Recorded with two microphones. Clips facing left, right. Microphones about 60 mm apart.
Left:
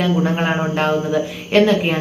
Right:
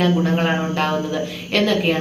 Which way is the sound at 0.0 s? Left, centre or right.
Centre.